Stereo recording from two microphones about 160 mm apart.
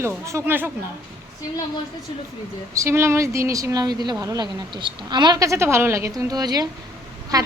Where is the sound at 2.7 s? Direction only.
15° right (ahead or behind).